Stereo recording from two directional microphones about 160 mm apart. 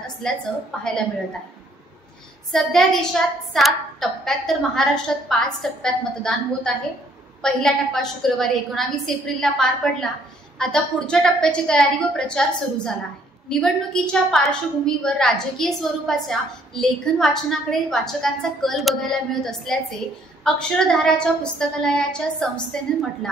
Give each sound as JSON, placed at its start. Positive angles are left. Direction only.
{"t": 0.0, "sound": "a woman's voice", "side_deg": 5}
{"t": 2.5, "sound": "a woman's voice", "side_deg": 0}